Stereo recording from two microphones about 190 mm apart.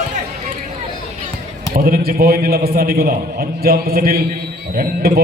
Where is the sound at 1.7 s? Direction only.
50° right (ahead or behind).